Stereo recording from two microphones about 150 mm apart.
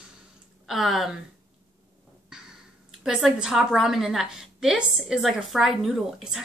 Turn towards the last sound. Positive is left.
turn(degrees=0)  # may be behind; listen again after turning